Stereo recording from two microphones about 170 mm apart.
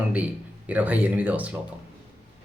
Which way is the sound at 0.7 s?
10° right (ahead or behind).